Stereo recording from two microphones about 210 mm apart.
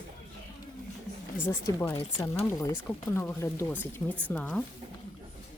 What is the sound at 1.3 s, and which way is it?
Speech, 10° left (ahead or behind).